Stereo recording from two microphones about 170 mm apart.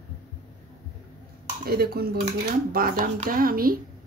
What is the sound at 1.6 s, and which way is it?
Speech, 65° right (ahead or behind).